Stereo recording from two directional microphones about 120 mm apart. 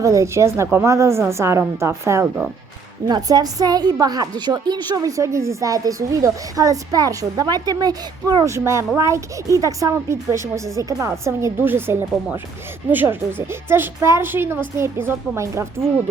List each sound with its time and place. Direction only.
0.0 s a woman's voice: 25° right (ahead or behind)
3.1 s a woman's voice: 35° right (ahead or behind)